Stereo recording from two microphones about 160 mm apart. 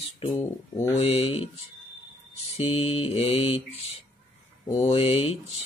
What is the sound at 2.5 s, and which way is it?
Speech, 40° left (ahead or behind).